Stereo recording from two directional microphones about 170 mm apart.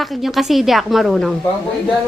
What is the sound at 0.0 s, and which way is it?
A woman's voice, centre (ahead or behind).